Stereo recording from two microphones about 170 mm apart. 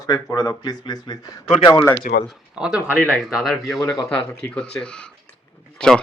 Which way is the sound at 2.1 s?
60° left (ahead or behind).